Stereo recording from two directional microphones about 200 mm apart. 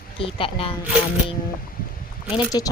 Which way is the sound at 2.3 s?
20° left (ahead or behind).